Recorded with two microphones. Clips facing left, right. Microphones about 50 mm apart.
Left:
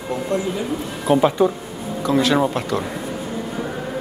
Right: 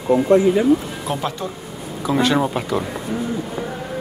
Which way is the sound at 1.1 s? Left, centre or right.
Centre.